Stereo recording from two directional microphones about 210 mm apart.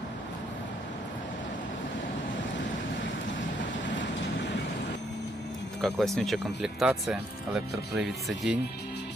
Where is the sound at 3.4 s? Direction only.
60° left (ahead or behind).